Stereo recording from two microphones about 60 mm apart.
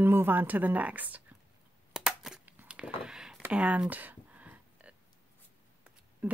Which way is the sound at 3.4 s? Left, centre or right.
Right.